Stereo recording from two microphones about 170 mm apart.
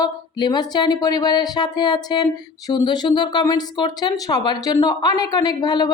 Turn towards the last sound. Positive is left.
turn(degrees=25)  # may be behind; listen again after turning